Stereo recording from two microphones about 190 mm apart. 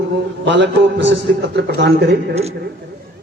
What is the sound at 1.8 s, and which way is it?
Speech, 60° right (ahead or behind).